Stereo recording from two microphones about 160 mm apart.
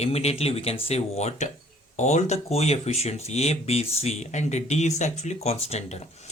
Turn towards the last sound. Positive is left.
turn(degrees=45)  # may be behind; listen again after turning